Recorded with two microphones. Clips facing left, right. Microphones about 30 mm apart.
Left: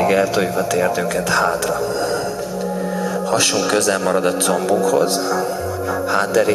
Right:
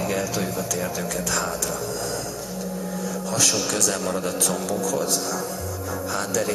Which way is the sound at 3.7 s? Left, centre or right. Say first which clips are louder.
Left 8 dB; left.